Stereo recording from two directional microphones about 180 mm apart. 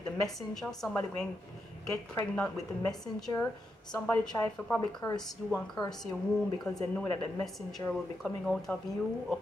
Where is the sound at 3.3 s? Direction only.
20° left (ahead or behind).